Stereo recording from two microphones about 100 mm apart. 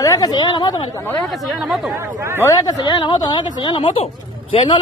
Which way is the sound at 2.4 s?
40° left (ahead or behind).